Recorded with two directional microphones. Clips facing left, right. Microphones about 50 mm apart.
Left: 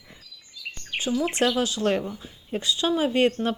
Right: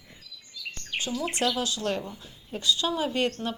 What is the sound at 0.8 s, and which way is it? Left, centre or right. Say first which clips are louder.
Speech: left 5 dB; centre.